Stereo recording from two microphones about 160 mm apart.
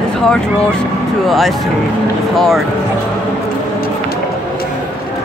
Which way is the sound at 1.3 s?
Centre (ahead or behind).